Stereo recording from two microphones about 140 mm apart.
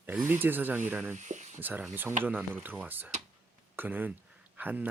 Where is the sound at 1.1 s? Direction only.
60° right (ahead or behind).